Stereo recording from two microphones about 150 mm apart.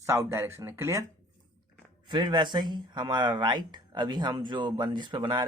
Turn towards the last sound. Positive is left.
turn(degrees=-35)  # may be behind; listen again after turning